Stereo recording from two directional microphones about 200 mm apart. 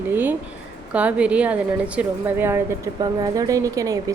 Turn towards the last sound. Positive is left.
turn(degrees=-15)  # may be behind; listen again after turning